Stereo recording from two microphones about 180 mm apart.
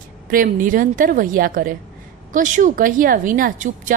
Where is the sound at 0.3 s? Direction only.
50° right (ahead or behind).